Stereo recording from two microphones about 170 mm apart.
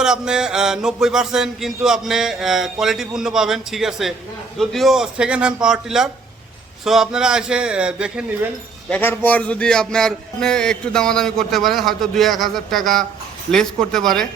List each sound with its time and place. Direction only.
0.0 s speech: 5° right (ahead or behind)
8.9 s speech: 10° left (ahead or behind)